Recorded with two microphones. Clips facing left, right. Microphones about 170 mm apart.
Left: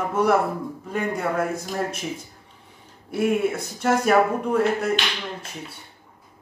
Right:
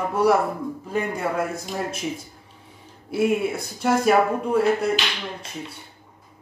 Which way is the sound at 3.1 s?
Centre (ahead or behind).